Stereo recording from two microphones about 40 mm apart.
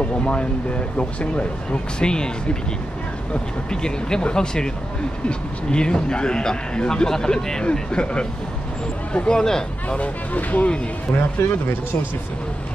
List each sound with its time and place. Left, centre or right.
0.0 s speech: left
3.8 s speech: left
5.7 s speech: left
9.4 s speech: centre
9.8 s speech: left
11.1 s speech: left